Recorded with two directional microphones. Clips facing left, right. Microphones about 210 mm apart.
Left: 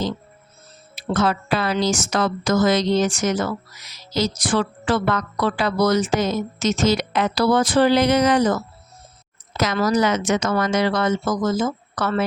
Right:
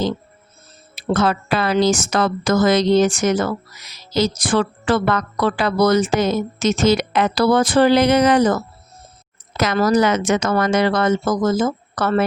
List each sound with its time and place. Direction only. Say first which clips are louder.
0.9 s speech: right 2 dB; 60° right (ahead or behind)
9.7 s speech: right 4 dB; 55° right (ahead or behind)